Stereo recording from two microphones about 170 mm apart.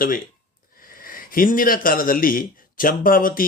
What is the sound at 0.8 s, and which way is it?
Speech, 55° left (ahead or behind).